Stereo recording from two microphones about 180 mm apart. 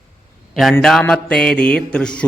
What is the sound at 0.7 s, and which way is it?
Mantra, 10° left (ahead or behind).